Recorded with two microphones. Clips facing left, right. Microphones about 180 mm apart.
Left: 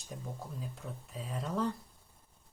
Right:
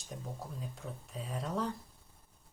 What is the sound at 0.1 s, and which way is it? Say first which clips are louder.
Speech: even; centre (ahead or behind).